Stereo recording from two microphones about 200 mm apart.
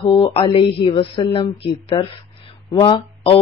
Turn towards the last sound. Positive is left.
turn(degrees=25)  # may be behind; listen again after turning